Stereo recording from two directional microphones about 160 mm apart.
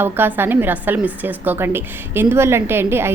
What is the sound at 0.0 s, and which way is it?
A woman's voice, 15° right (ahead or behind).